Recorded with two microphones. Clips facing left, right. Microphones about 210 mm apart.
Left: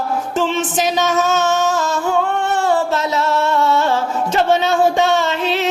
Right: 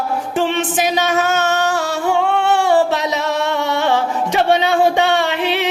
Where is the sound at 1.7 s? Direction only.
75° right (ahead or behind).